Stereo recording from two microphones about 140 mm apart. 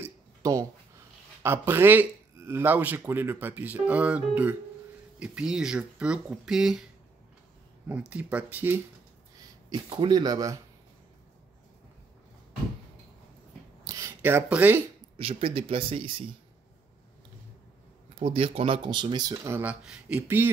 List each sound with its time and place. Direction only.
0.0 s a sound: 20° right (ahead or behind)
1.4 s speech: 15° right (ahead or behind)
8.1 s speech: 10° right (ahead or behind)
9.8 s speech: 35° right (ahead or behind)
13.8 s a sound: 20° right (ahead or behind)
15.1 s speech: 40° right (ahead or behind)
18.2 s speech: 40° right (ahead or behind); by 19.6 s 25° right (ahead or behind)
19.6 s speech: 5° right (ahead or behind)